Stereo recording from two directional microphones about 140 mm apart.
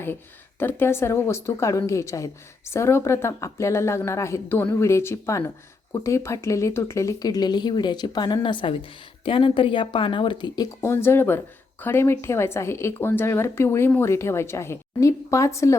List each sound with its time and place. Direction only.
0.6 s a woman's voice: 15° left (ahead or behind)
10.8 s a woman's voice: 20° left (ahead or behind)